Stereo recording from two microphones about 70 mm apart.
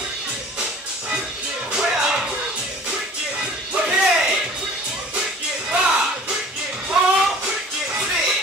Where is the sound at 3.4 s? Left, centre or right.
Centre.